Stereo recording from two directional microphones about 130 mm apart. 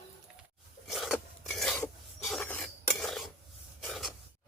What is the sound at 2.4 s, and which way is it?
Cutlery, 15° left (ahead or behind).